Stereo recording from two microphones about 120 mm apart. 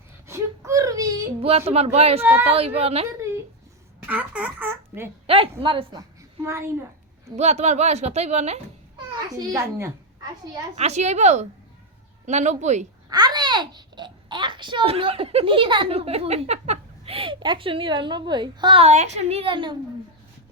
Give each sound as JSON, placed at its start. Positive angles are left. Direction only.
{"t": 0.3, "sound": "whimper", "side_deg": -25}
{"t": 1.4, "sound": "a woman's voice", "side_deg": -55}
{"t": 2.2, "sound": "speech", "side_deg": -15}
{"t": 2.5, "sound": "a woman's voice", "side_deg": -55}
{"t": 4.0, "sound": "speech", "side_deg": -10}
{"t": 5.2, "sound": "a man's voice", "side_deg": -50}
{"t": 6.0, "sound": "a woman's voice", "side_deg": -25}
{"t": 7.3, "sound": "speech", "side_deg": -65}
{"t": 9.1, "sound": "a child's voice", "side_deg": -30}
{"t": 10.8, "sound": "speech", "side_deg": -65}
{"t": 13.1, "sound": "a child's voice", "side_deg": -35}
{"t": 18.8, "sound": "a woman's voice", "side_deg": -70}